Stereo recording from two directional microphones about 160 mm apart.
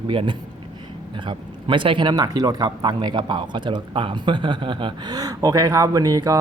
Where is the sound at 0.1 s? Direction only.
35° right (ahead or behind).